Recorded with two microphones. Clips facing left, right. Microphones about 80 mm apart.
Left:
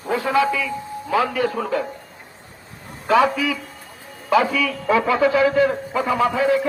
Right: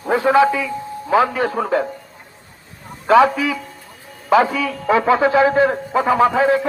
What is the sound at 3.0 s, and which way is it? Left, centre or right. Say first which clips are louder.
A man's voice: right 4 dB; right.